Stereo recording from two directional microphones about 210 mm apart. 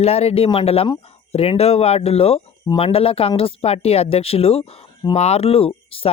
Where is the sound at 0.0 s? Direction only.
30° left (ahead or behind).